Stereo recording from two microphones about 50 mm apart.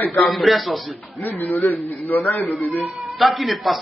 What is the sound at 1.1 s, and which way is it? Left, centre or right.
Speech, left.